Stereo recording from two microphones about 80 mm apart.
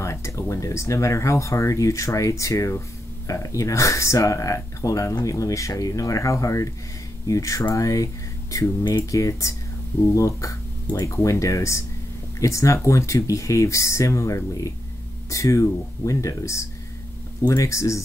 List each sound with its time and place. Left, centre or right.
0.0 s speech: left
9.1 s speech: left